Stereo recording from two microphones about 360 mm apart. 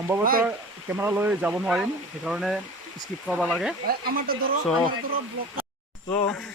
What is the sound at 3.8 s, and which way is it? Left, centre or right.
Speech, right.